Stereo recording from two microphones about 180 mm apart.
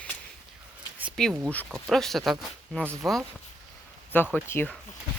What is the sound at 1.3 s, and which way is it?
Speech, 10° right (ahead or behind).